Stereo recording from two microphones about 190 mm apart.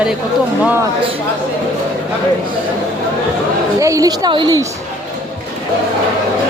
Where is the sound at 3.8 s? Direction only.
15° right (ahead or behind).